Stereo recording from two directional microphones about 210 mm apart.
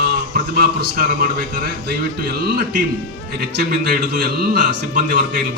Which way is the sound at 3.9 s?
40° right (ahead or behind).